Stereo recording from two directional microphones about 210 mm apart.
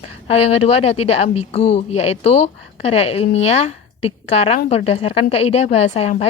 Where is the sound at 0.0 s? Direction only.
30° left (ahead or behind).